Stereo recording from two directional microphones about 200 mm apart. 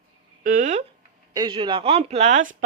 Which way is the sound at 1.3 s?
25° right (ahead or behind).